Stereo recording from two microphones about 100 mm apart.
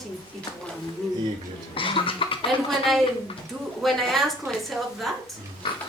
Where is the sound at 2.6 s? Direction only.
Centre (ahead or behind).